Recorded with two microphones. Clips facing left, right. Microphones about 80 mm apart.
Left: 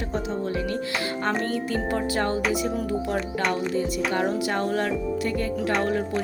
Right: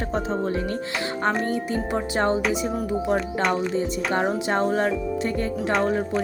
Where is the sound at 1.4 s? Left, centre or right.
Right.